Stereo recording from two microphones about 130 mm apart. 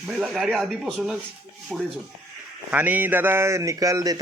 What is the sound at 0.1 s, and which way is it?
A man's voice, centre (ahead or behind).